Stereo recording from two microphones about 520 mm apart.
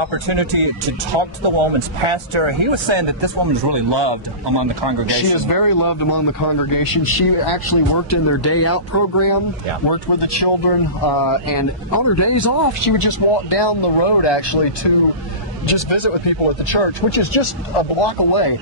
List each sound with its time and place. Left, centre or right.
0.0 s speech: right
5.3 s speech: left
8.1 s speech: left
9.8 s speech: left
18.3 s speech: left